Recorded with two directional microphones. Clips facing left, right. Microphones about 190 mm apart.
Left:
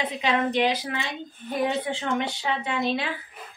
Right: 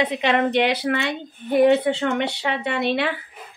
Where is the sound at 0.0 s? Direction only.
70° right (ahead or behind).